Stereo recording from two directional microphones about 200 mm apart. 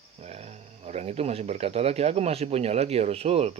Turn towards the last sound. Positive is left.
turn(degrees=-30)  # may be behind; listen again after turning